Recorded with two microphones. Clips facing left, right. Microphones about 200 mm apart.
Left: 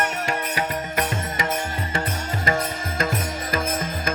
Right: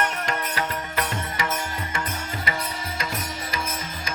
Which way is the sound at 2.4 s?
45° left (ahead or behind).